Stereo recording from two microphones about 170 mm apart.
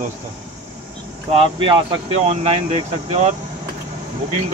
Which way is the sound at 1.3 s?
30° right (ahead or behind).